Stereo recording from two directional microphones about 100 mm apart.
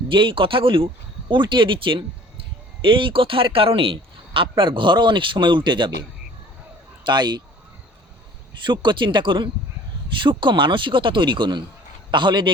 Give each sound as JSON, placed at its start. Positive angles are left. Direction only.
{"t": 0.1, "sound": "speech", "side_deg": -60}
{"t": 4.4, "sound": "speech", "side_deg": -60}
{"t": 8.6, "sound": "speech", "side_deg": -50}